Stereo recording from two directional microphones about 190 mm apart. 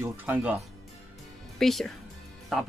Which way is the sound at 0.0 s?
10° right (ahead or behind).